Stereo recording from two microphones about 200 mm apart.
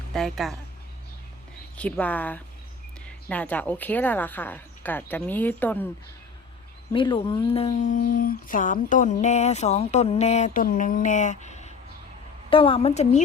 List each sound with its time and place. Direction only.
0.1 s a woman's voice: centre (ahead or behind)
1.7 s speech: 5° left (ahead or behind)
6.9 s a woman's voice: 25° left (ahead or behind)